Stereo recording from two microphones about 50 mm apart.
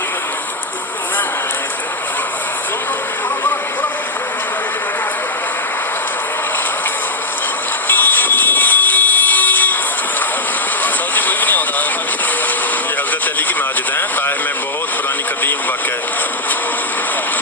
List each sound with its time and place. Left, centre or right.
7.9 s fire alarm: left
10.8 s vehicle: left